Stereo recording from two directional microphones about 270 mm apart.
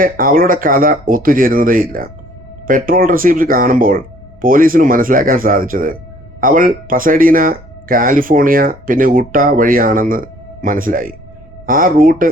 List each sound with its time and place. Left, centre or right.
0.0 s speech: right